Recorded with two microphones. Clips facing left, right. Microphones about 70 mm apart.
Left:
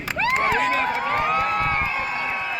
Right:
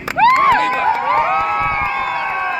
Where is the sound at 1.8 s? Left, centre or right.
Right.